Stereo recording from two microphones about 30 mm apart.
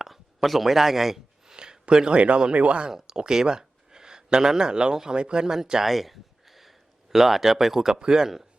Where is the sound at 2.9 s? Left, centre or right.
Right.